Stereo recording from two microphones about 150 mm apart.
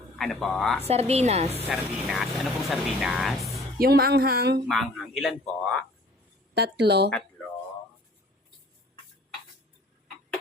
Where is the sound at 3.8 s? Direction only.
90° right.